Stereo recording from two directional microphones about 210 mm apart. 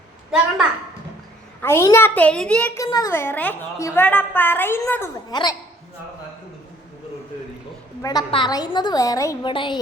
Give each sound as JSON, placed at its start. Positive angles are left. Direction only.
{"t": 1.6, "sound": "a woman's voice", "side_deg": 10}
{"t": 8.0, "sound": "a woman's voice", "side_deg": 20}